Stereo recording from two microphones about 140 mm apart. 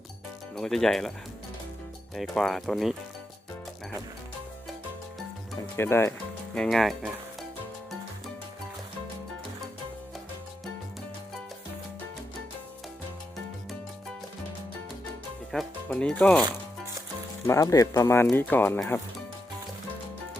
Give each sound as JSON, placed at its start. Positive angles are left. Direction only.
{"t": 0.5, "sound": "speech", "side_deg": 5}
{"t": 2.1, "sound": "speech", "side_deg": 0}
{"t": 5.7, "sound": "speech", "side_deg": 15}
{"t": 6.5, "sound": "speech", "side_deg": 5}
{"t": 15.5, "sound": "speech", "side_deg": 5}
{"t": 17.4, "sound": "speech", "side_deg": 20}